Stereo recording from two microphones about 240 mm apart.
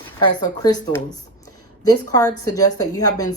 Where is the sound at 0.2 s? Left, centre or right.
Centre.